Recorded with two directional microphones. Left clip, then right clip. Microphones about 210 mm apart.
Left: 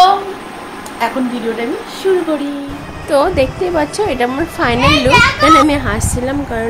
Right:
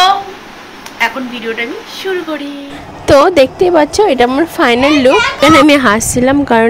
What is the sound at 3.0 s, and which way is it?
A woman's voice, 40° right (ahead or behind).